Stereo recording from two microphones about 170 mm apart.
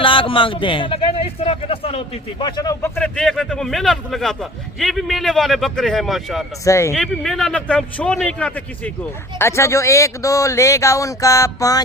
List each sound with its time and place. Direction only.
0.0 s a man's voice: 30° left (ahead or behind); by 6.4 s centre (ahead or behind)
6.7 s speech: 15° left (ahead or behind)
6.9 s speech: centre (ahead or behind); by 11.8 s 20° left (ahead or behind)